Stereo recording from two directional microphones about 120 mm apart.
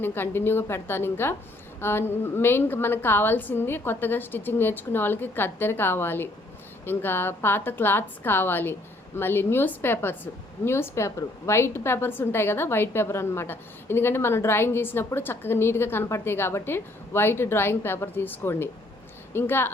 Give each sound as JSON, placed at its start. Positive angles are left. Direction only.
{"t": 0.0, "sound": "a woman's voice", "side_deg": 20}